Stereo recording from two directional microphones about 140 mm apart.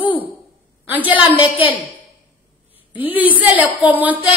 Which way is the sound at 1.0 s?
40° left (ahead or behind).